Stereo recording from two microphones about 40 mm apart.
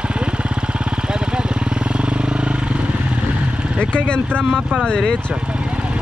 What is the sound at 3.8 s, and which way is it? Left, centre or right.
Speech, left.